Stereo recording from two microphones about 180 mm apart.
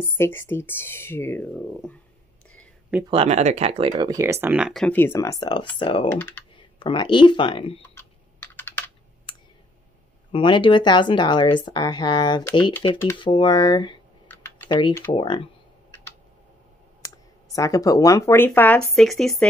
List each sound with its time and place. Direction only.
0.2 s speech: 10° left (ahead or behind)
3.1 s speech: 35° right (ahead or behind); by 6.0 s 25° left (ahead or behind)
6.0 s speech: 10° left (ahead or behind)
6.5 s speech: 25° left (ahead or behind)
7.8 s computer keyboard: 10° left (ahead or behind)
10.3 s speech: 25° left (ahead or behind)
14.2 s typing: 10° left (ahead or behind)
14.7 s speech: 25° left (ahead or behind)
17.6 s speech: 20° left (ahead or behind); by 19.3 s centre (ahead or behind)